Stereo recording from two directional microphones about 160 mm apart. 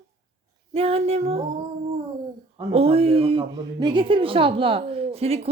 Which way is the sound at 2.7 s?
40° right (ahead or behind).